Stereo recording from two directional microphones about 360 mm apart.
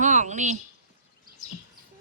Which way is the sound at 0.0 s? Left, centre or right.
Centre.